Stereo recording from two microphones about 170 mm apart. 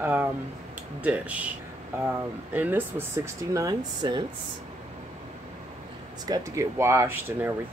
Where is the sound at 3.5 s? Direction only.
25° right (ahead or behind).